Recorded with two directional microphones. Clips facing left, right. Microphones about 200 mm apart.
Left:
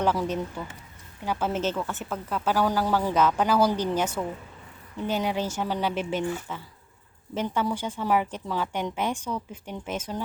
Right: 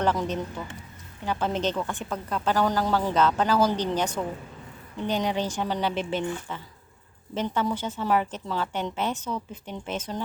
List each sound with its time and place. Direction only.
0.0 s a woman's voice: 10° left (ahead or behind)